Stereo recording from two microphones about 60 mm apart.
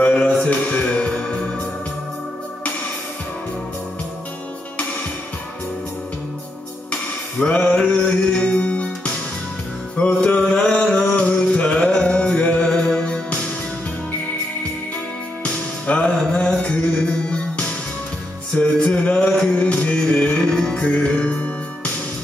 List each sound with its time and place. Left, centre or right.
0.0 s music: centre
6.9 s music: centre
10.4 s a sound: centre
10.7 s music: centre
15.4 s music: centre